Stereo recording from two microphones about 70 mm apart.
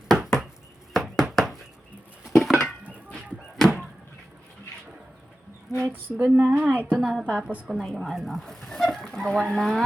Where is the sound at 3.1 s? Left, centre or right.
Centre.